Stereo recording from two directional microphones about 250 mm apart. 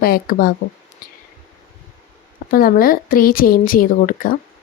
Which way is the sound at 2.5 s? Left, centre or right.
Left.